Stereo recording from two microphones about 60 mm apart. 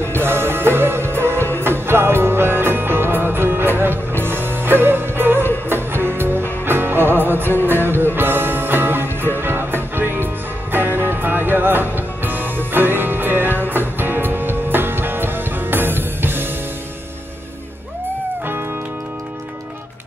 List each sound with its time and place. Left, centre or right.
0.0 s music: right